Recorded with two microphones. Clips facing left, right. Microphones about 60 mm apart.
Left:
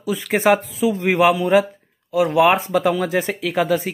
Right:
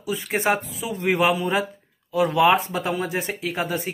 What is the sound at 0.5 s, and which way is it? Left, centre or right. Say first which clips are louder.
Speech: left 9 dB; left.